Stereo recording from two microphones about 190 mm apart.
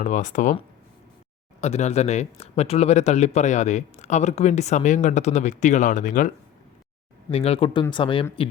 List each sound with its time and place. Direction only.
0.0 s speech: 40° left (ahead or behind)
1.6 s speech: 35° left (ahead or behind)
7.3 s speech: 30° left (ahead or behind)